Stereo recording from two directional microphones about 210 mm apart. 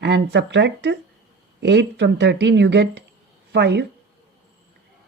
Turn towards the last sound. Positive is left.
turn(degrees=-55)  # may be behind; listen again after turning